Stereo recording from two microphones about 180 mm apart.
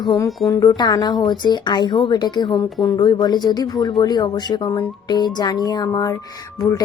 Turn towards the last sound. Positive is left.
turn(degrees=20)  # may be behind; listen again after turning